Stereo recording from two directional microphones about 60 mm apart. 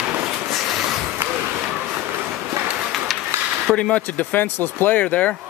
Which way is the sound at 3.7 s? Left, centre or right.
Left.